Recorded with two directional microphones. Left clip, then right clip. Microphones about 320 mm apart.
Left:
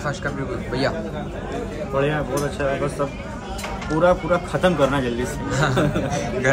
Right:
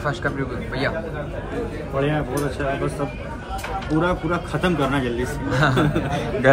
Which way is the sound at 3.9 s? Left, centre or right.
Centre.